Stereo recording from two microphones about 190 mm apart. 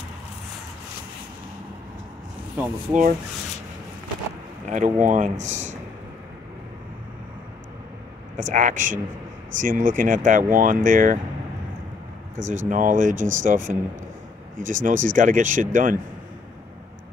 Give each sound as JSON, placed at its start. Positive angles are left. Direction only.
{"t": 2.5, "sound": "speech", "side_deg": -10}
{"t": 4.6, "sound": "speech", "side_deg": -40}
{"t": 8.4, "sound": "speech", "side_deg": -40}
{"t": 12.4, "sound": "speech", "side_deg": -40}